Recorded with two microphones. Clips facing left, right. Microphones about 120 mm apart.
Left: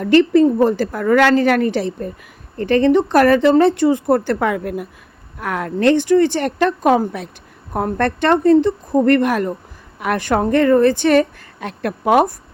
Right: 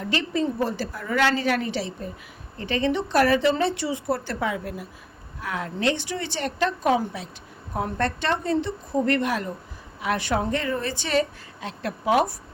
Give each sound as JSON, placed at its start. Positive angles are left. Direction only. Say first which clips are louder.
{"t": 0.0, "sound": "a woman's voice", "louder": "left 14 dB", "side_deg": 55}